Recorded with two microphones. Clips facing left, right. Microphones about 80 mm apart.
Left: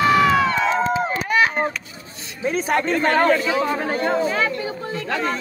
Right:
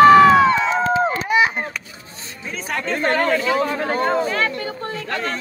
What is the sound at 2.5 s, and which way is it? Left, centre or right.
Chatter, left.